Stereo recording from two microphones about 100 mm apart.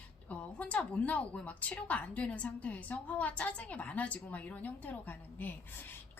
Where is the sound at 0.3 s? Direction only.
15° left (ahead or behind).